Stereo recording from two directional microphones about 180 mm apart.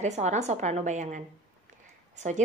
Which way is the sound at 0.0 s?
40° right (ahead or behind).